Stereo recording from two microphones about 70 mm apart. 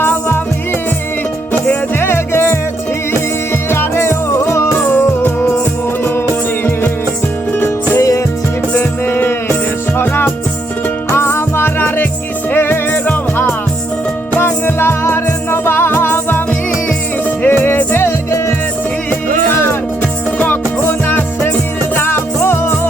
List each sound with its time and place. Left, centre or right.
0.0 s music: left
2.0 s music: left
3.7 s music: left
7.6 s music: left
8.7 s music: left
20.4 s music: left